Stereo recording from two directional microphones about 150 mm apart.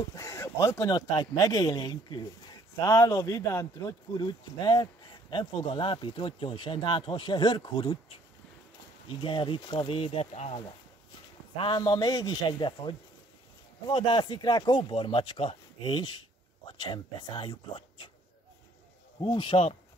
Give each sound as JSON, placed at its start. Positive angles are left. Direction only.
{"t": 0.1, "sound": "speech", "side_deg": 20}
{"t": 4.2, "sound": "speech", "side_deg": 30}
{"t": 9.2, "sound": "speech", "side_deg": 35}
{"t": 11.5, "sound": "speech", "side_deg": 30}
{"t": 19.1, "sound": "speech", "side_deg": 30}